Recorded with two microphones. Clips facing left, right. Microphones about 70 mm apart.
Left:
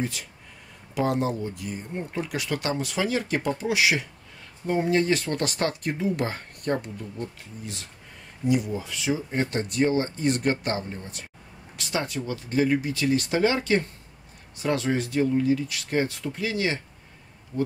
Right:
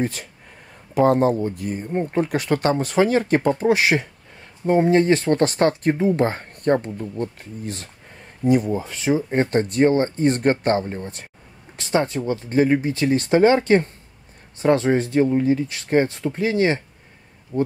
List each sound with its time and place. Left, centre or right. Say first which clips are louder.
0.0 s speech: right 6 dB; right